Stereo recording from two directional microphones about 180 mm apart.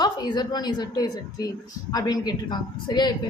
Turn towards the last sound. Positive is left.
turn(degrees=25)  # may be behind; listen again after turning